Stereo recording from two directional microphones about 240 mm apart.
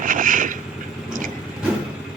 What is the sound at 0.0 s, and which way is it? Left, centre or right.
Vehicle, right.